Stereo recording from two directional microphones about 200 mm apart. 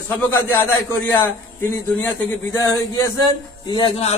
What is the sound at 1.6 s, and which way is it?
A man's voice, 10° left (ahead or behind).